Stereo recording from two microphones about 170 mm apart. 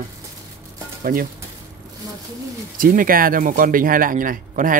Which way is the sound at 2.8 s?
55° right (ahead or behind).